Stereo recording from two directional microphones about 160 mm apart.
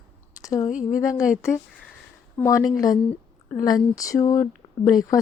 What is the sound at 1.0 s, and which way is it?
Speech, 20° left (ahead or behind).